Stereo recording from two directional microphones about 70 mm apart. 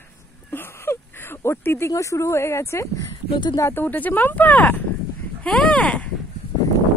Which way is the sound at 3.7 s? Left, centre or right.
Left.